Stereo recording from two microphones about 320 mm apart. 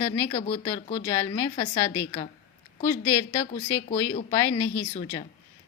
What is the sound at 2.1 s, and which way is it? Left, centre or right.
Speech, centre.